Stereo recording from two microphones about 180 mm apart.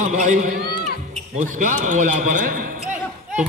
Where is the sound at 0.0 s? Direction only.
40° right (ahead or behind).